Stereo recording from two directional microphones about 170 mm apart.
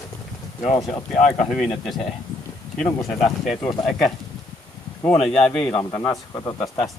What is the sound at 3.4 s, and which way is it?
Speech, centre (ahead or behind).